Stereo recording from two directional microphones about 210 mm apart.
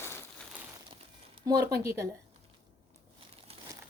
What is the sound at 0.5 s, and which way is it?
Crumpling, 5° right (ahead or behind).